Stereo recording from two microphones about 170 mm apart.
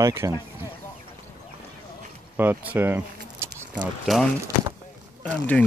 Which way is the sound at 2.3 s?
10° right (ahead or behind).